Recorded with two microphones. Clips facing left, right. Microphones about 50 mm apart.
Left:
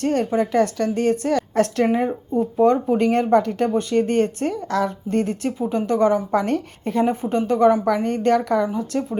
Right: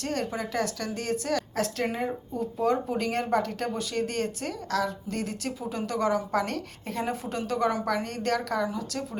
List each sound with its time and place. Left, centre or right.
0.0 s a woman's voice: left